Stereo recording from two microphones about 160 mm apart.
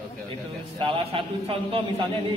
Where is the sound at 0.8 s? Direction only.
35° right (ahead or behind).